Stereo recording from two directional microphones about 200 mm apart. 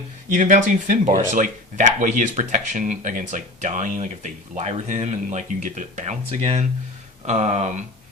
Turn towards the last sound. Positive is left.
turn(degrees=-35)  # may be behind; listen again after turning